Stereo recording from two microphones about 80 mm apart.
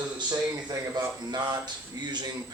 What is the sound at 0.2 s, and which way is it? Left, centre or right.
Speech, right.